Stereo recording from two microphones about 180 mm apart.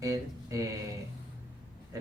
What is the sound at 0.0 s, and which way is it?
Speech, 15° right (ahead or behind).